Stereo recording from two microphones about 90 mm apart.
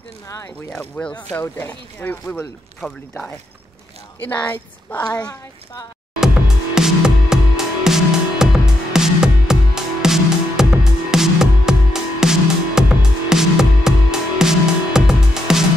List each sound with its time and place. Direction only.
0.7 s speech: 15° left (ahead or behind)
4.3 s a woman's voice: 20° left (ahead or behind)
5.0 s a woman's voice: 45° left (ahead or behind)
6.1 s music: 5° right (ahead or behind)